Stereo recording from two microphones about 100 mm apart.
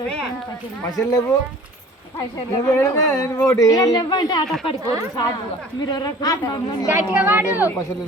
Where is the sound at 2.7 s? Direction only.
35° left (ahead or behind).